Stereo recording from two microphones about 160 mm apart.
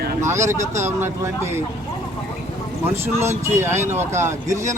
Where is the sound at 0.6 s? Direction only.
45° right (ahead or behind).